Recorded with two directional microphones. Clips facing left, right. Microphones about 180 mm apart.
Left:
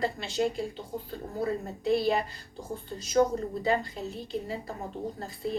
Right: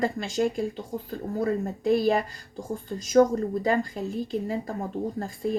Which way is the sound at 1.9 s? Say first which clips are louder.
Right 3 dB; 45° right (ahead or behind).